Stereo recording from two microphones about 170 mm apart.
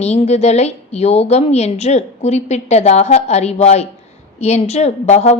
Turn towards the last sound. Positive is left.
turn(degrees=40)  # may be behind; listen again after turning